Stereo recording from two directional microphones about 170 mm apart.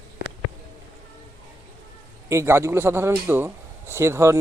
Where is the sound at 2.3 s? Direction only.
15° right (ahead or behind).